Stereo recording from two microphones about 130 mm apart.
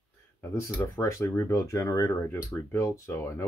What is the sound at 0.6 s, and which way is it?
Speech, 20° left (ahead or behind).